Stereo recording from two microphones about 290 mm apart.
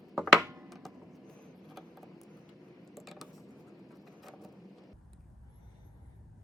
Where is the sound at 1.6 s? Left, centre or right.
Centre.